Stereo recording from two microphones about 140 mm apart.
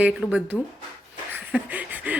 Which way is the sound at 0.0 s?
10° right (ahead or behind).